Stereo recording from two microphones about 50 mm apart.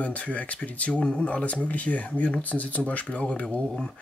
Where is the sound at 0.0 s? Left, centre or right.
Left.